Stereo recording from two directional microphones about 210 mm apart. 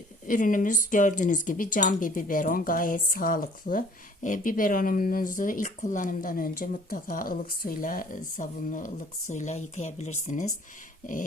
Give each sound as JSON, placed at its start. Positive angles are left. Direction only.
{"t": 0.3, "sound": "speech", "side_deg": 40}